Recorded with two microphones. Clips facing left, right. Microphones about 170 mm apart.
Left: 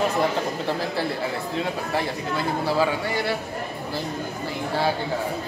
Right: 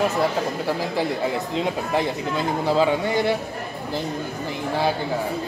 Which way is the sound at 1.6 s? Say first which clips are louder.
Right 3 dB; 20° right (ahead or behind).